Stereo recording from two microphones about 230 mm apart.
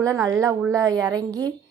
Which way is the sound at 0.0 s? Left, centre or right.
Centre.